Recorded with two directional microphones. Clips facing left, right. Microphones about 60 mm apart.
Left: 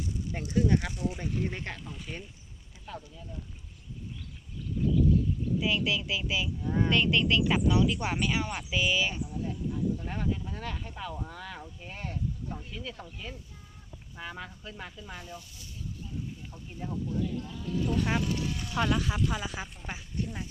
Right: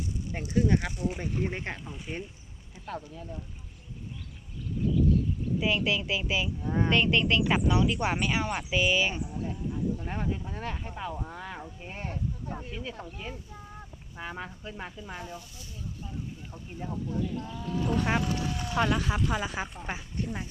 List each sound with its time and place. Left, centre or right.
0.0 s a sound: right
0.7 s speech: centre
1.2 s speech: centre
2.8 s speech: right
5.7 s speech: right
6.6 s speech: centre
6.8 s speech: right
17.1 s speech: right